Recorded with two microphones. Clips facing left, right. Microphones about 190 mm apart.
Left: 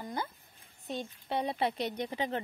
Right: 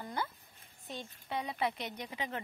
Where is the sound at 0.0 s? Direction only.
20° left (ahead or behind).